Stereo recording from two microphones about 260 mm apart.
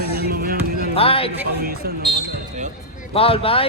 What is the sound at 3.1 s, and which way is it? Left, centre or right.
Speech, left.